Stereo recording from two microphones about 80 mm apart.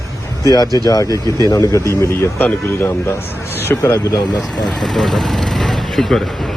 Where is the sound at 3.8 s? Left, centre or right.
Left.